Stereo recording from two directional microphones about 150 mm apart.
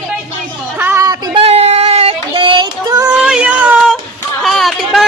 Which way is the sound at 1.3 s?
45° right (ahead or behind).